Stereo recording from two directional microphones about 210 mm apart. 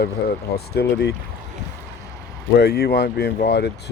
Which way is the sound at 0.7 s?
50° left (ahead or behind).